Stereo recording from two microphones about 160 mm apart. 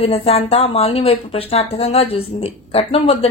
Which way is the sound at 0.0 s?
40° left (ahead or behind).